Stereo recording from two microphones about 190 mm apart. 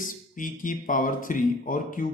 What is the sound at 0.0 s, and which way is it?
A man's voice, 45° left (ahead or behind).